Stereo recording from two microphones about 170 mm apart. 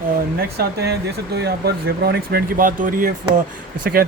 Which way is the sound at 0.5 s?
70° right (ahead or behind).